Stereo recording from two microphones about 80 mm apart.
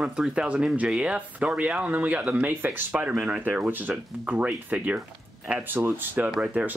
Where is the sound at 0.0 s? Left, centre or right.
Centre.